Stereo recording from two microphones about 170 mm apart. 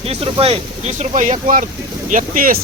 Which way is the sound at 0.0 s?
35° right (ahead or behind).